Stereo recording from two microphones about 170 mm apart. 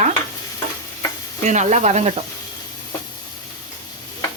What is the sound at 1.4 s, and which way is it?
Speech, 45° right (ahead or behind).